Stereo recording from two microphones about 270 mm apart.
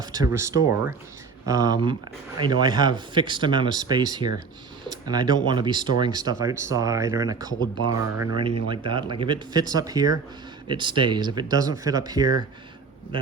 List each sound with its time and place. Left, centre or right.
0.0 s speech: centre